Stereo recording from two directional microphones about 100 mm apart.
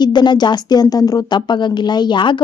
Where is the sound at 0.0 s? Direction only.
45° left (ahead or behind).